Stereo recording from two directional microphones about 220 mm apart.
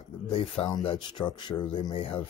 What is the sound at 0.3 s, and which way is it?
Speech, 25° left (ahead or behind).